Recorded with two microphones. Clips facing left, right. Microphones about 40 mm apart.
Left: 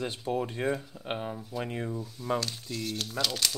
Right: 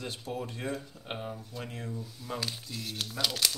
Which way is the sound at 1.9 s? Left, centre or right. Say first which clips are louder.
Left 7 dB; centre.